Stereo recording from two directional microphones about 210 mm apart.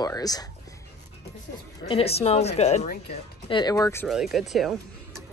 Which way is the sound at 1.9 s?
30° left (ahead or behind).